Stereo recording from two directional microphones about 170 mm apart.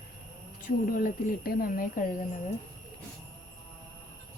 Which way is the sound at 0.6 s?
55° left (ahead or behind).